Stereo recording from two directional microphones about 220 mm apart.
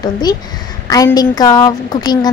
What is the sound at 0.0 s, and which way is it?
A woman's voice, 20° left (ahead or behind).